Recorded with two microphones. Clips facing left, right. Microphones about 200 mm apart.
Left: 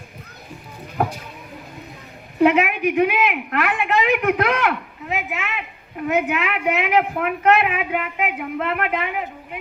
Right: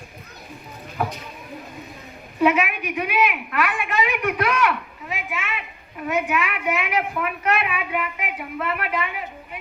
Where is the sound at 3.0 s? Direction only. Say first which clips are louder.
Left 2 dB; 60° left (ahead or behind).